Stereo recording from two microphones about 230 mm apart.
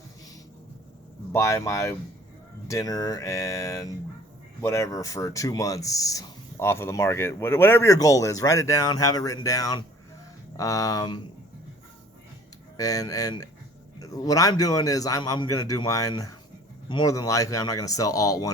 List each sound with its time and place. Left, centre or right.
1.3 s speech: centre
12.7 s speech: centre